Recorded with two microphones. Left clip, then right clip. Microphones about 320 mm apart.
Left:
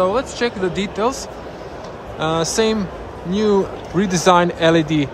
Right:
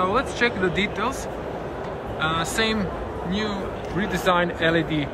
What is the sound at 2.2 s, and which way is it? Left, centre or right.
Speech, centre.